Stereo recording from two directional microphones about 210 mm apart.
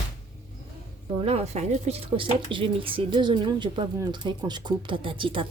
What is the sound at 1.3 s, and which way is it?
Speech, 30° right (ahead or behind).